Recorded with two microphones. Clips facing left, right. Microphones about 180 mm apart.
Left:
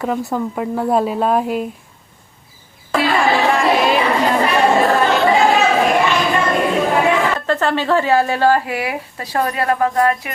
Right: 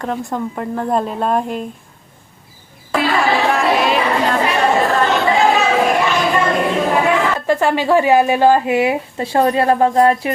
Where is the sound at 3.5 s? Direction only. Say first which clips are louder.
Left 1 dB; centre (ahead or behind).